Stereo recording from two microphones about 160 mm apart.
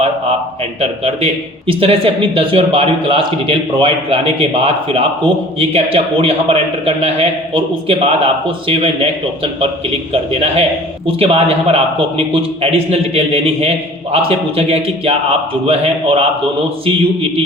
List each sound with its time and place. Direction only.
0.8 s a man's voice: 40° right (ahead or behind)